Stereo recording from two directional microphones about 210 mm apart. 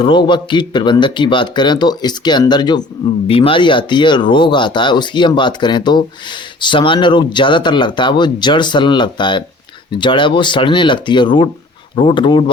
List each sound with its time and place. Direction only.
0.0 s speech: 20° left (ahead or behind)